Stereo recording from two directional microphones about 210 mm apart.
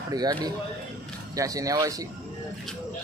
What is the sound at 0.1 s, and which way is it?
A man's voice, 20° right (ahead or behind).